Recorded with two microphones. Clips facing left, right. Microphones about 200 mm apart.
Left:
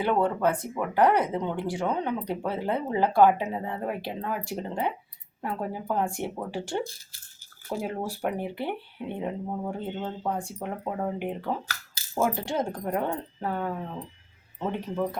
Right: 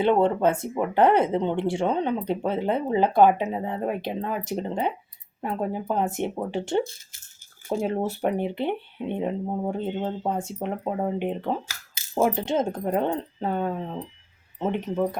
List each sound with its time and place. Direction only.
0.0 s speech: 25° right (ahead or behind)